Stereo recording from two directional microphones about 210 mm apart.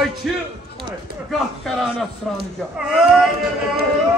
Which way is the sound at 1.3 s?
Centre (ahead or behind).